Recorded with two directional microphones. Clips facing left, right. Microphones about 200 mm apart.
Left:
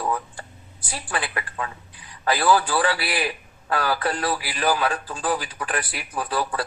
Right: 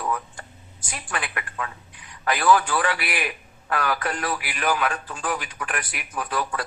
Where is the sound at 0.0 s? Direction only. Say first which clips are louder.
Left 2 dB; 30° left (ahead or behind).